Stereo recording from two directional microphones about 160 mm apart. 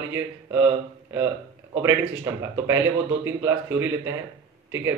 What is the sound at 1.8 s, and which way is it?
A man's voice, 15° right (ahead or behind).